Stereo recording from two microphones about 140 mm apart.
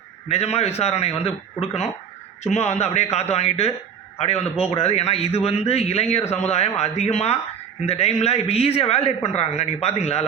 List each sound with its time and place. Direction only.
0.3 s a man's voice: 50° left (ahead or behind)